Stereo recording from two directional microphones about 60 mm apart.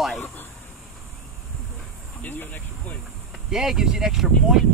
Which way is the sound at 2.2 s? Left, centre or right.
Left.